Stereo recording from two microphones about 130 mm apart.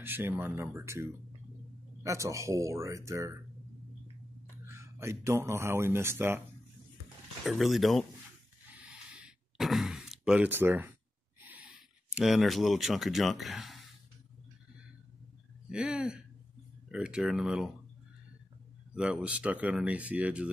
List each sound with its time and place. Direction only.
0.0 s speech: 15° right (ahead or behind)
4.6 s speech: 20° right (ahead or behind)
7.4 s speech: centre (ahead or behind)
9.1 s sigh: 5° right (ahead or behind)
12.1 s speech: 5° right (ahead or behind)
15.7 s speech: 5° right (ahead or behind)
19.2 s speech: 10° right (ahead or behind)